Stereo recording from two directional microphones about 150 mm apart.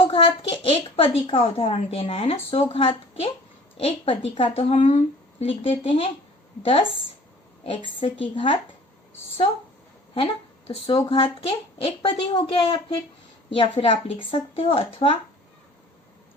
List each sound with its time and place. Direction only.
0.4 s speech: 35° left (ahead or behind)
10.2 s speech: 35° left (ahead or behind)